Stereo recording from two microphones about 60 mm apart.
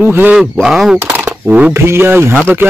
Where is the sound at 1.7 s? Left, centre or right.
Right.